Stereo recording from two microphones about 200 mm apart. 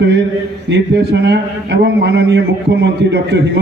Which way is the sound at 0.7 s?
60° right (ahead or behind).